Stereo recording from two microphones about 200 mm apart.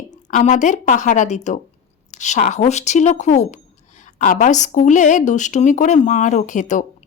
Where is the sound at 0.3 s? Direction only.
40° left (ahead or behind).